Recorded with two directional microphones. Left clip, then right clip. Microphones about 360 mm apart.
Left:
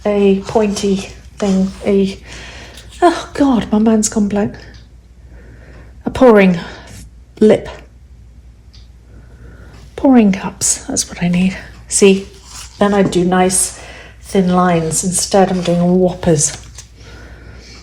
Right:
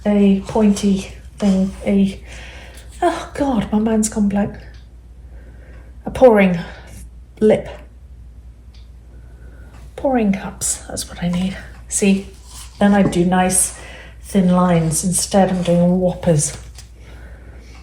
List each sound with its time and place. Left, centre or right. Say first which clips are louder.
0.0 s a woman's voice: left 5 dB; left
6.1 s a sound: left 2 dB; left
9.9 s a woman's voice: left 6 dB; left
11.2 s speech: left 6 dB; left
11.5 s a woman's voice: left 6 dB; left